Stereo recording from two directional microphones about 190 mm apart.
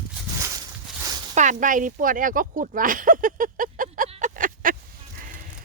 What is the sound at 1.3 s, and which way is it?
Speech, 40° right (ahead or behind).